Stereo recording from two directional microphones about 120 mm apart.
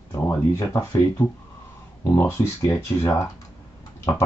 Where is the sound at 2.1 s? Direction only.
20° left (ahead or behind).